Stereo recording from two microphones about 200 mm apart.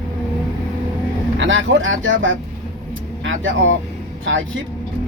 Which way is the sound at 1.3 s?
70° right (ahead or behind).